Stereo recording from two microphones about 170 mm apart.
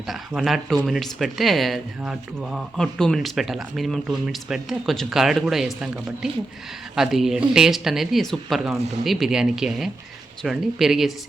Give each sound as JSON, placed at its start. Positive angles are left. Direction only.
{"t": 0.1, "sound": "speech", "side_deg": 0}